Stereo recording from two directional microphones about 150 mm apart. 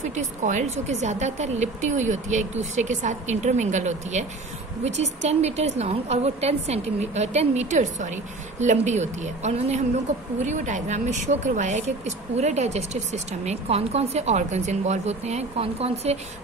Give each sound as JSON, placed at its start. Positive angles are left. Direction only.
{"t": 0.1, "sound": "a woman's voice", "side_deg": -50}